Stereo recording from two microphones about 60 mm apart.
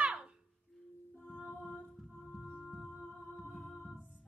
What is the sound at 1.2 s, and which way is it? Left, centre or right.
Music, centre.